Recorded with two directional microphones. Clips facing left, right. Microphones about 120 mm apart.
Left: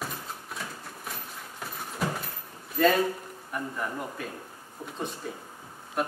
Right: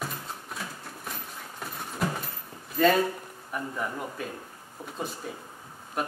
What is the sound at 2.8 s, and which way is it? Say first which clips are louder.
A man's voice: right 1 dB; centre (ahead or behind).